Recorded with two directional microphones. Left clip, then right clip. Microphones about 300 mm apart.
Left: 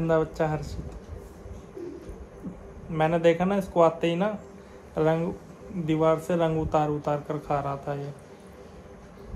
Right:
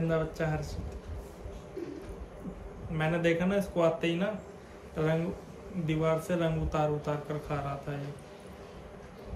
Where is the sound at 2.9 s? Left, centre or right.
Centre.